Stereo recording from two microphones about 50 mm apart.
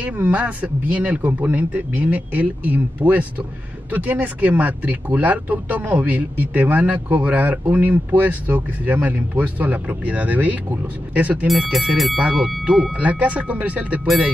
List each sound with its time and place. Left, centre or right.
0.0 s speech: right
11.4 s speech: centre
12.2 s speech: right